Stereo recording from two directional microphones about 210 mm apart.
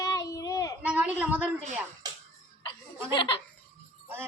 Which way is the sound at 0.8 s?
5° right (ahead or behind).